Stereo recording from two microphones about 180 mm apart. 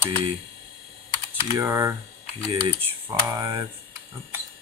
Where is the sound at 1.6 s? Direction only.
15° right (ahead or behind).